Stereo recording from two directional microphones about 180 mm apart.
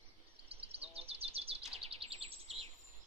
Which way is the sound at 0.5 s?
35° right (ahead or behind).